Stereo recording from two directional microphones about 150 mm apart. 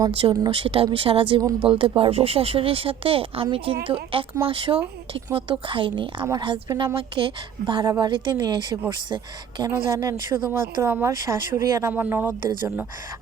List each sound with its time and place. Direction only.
0.2 s a woman's voice: 35° right (ahead or behind)